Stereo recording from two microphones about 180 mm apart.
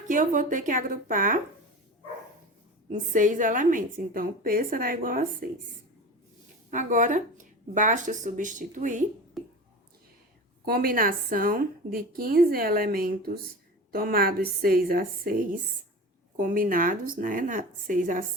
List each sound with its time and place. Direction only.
0.1 s a woman's voice: 45° right (ahead or behind)
2.9 s a woman's voice: 45° right (ahead or behind)
6.7 s a woman's voice: 45° right (ahead or behind)
9.4 s whispering: centre (ahead or behind)
10.7 s a woman's voice: 55° right (ahead or behind)